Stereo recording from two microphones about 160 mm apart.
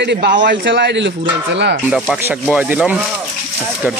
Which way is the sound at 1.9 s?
Centre (ahead or behind).